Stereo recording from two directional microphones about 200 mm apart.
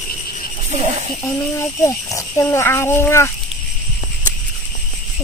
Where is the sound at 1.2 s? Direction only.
15° left (ahead or behind).